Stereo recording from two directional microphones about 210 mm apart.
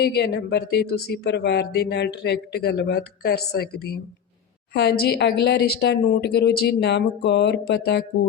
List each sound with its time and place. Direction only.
0.0 s speech: 50° left (ahead or behind)